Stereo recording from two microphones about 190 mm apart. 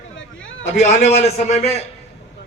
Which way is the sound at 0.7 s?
40° left (ahead or behind).